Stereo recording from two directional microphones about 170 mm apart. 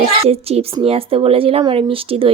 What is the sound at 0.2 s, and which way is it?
A woman's voice, 35° right (ahead or behind).